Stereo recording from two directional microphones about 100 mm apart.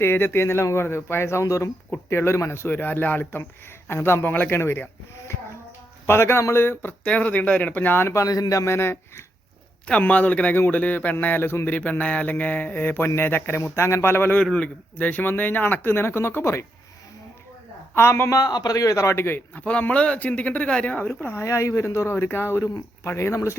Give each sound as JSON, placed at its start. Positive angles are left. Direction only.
{"t": 0.0, "sound": "speech", "side_deg": 25}
{"t": 6.1, "sound": "speech", "side_deg": 25}
{"t": 9.8, "sound": "a man's voice", "side_deg": 15}
{"t": 17.9, "sound": "a man's voice", "side_deg": 25}